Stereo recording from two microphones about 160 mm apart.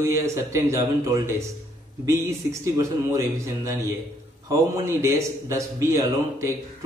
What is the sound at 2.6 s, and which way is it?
A man's voice, 20° right (ahead or behind).